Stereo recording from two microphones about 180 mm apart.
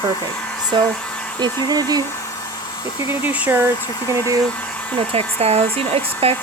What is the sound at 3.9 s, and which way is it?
Speech, 20° left (ahead or behind).